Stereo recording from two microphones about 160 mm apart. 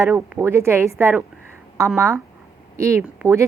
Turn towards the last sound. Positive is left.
turn(degrees=-20)  # may be behind; listen again after turning